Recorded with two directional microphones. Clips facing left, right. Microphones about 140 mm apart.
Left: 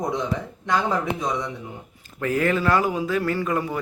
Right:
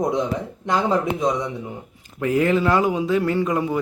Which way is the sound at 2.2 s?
20° right (ahead or behind).